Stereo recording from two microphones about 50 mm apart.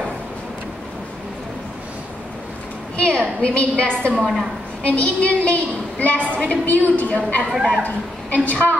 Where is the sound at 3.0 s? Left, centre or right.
Centre.